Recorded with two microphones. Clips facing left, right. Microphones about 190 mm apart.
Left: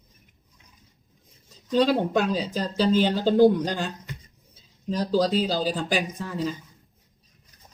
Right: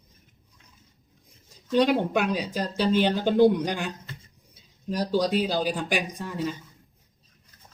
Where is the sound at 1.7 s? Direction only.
15° right (ahead or behind).